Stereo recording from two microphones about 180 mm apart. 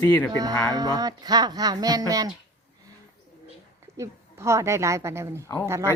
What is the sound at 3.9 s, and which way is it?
Speech, 15° right (ahead or behind).